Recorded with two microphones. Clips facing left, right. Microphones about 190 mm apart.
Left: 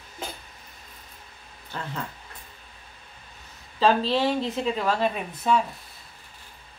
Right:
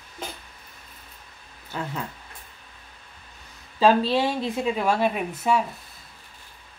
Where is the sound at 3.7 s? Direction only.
10° right (ahead or behind).